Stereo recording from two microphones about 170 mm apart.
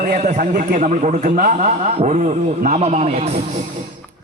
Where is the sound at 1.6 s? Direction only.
40° right (ahead or behind).